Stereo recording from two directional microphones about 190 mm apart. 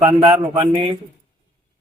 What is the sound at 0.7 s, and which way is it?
Speech, 30° right (ahead or behind).